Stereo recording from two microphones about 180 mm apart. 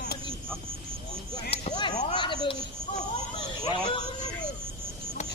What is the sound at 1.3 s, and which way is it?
Speech, 30° left (ahead or behind).